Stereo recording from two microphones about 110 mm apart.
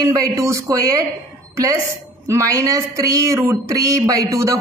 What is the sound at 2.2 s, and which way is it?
Speech, 30° right (ahead or behind).